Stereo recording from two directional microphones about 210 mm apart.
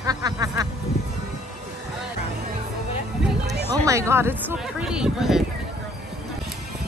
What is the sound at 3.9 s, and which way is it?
Speech, 15° right (ahead or behind).